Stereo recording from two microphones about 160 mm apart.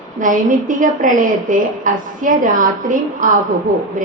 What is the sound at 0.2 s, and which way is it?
A woman's voice, 55° right (ahead or behind).